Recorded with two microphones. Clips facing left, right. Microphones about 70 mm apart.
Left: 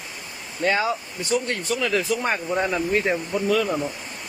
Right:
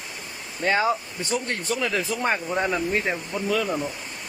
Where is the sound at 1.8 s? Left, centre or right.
Centre.